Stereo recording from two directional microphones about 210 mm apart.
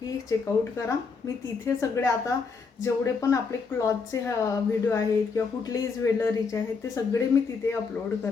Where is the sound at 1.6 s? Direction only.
15° left (ahead or behind).